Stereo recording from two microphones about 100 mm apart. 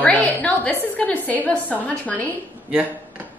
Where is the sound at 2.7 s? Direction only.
15° right (ahead or behind).